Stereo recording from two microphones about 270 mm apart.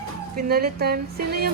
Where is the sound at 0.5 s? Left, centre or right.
Right.